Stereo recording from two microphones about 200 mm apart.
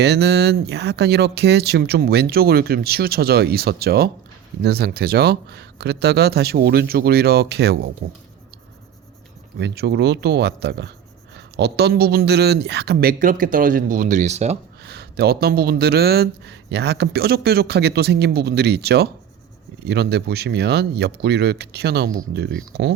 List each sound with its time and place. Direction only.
0.0 s speech: 55° right (ahead or behind)
9.6 s speech: 55° right (ahead or behind); by 14.6 s 35° right (ahead or behind)
14.8 s speech: 55° right (ahead or behind)